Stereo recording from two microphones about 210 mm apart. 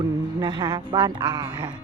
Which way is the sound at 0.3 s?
20° right (ahead or behind).